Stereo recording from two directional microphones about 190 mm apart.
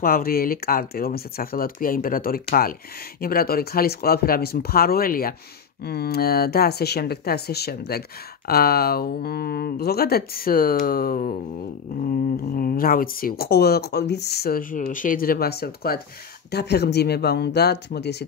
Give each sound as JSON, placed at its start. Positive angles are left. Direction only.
{"t": 0.0, "sound": "speech", "side_deg": 50}